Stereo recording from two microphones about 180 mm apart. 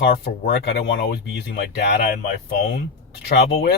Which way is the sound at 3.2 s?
65° left (ahead or behind).